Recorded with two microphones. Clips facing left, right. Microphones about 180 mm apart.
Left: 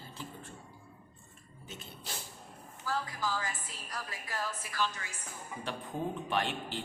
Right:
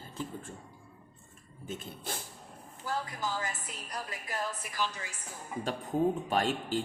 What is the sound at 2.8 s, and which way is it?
A woman's voice, 20° right (ahead or behind).